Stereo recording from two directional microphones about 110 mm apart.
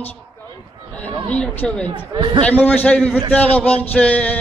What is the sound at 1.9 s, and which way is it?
Speech, 45° right (ahead or behind).